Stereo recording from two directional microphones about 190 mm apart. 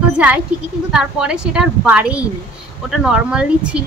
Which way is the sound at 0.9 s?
5° right (ahead or behind).